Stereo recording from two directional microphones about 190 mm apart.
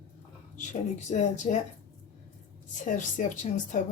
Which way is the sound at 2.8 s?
40° left (ahead or behind).